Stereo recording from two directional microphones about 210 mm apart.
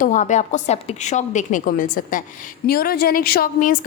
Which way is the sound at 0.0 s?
35° left (ahead or behind).